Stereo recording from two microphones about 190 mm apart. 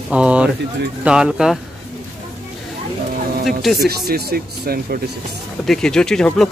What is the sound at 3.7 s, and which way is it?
Speech, 55° right (ahead or behind).